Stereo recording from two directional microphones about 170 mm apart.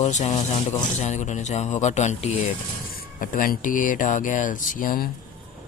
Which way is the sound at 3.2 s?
55° left (ahead or behind).